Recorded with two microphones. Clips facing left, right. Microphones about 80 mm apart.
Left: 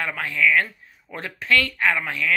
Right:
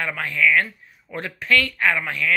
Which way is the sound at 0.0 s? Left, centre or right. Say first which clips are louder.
Right 1 dB; left.